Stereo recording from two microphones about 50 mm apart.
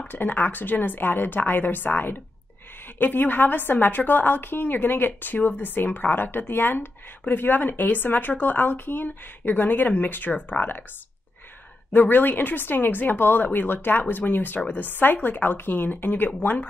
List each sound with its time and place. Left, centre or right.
0.1 s a woman's voice: left
11.9 s a woman's voice: left